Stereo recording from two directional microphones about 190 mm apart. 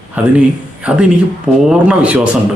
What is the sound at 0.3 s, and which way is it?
Speech, 5° right (ahead or behind).